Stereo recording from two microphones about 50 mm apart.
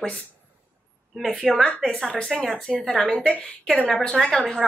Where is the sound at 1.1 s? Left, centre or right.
Centre.